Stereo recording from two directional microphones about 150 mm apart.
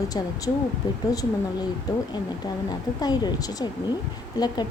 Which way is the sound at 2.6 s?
25° left (ahead or behind).